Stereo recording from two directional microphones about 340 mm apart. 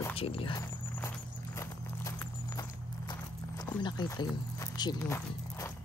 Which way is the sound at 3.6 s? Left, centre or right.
Centre.